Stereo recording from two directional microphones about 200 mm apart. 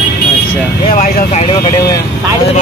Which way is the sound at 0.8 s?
40° left (ahead or behind).